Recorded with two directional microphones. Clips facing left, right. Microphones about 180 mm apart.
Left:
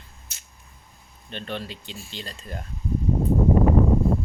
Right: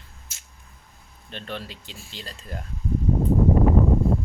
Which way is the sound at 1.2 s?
Centre (ahead or behind).